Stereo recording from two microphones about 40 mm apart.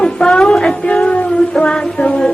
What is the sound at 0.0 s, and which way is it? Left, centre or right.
Music, left.